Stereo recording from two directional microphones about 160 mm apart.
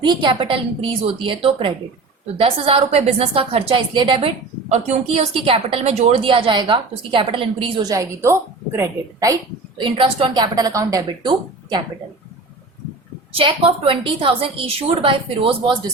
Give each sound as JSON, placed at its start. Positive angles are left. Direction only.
{"t": 0.0, "sound": "a woman's voice", "side_deg": -30}
{"t": 4.7, "sound": "a woman's voice", "side_deg": -45}
{"t": 7.8, "sound": "a woman's voice", "side_deg": -20}
{"t": 9.9, "sound": "a woman's voice", "side_deg": -35}
{"t": 13.4, "sound": "a woman's voice", "side_deg": -30}